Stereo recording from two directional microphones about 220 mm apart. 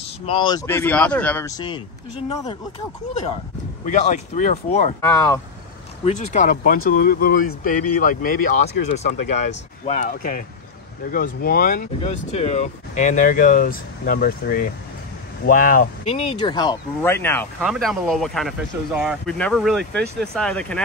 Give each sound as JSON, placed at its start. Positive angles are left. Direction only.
{"t": 0.3, "sound": "speech", "side_deg": 25}
{"t": 0.7, "sound": "speech", "side_deg": 10}
{"t": 3.8, "sound": "speech", "side_deg": 35}
{"t": 5.0, "sound": "speech", "side_deg": 15}
{"t": 6.0, "sound": "speech", "side_deg": 30}